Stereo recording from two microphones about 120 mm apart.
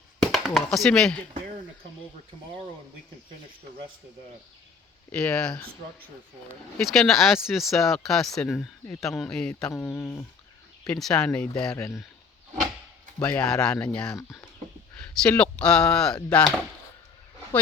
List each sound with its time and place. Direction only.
0.2 s speech: centre (ahead or behind)
5.1 s speech: 10° left (ahead or behind)
6.7 s speech: 5° left (ahead or behind)
8.5 s speech: 20° left (ahead or behind)
9.1 s speech: 10° left (ahead or behind)
10.8 s speech: 5° left (ahead or behind)
11.8 s speech: 30° left (ahead or behind)
13.2 s speech: 10° left (ahead or behind)
14.1 s speech: 25° left (ahead or behind)
14.9 s speech: 10° left (ahead or behind)